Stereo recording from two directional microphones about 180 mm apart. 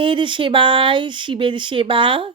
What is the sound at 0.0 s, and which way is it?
Speech, 25° right (ahead or behind).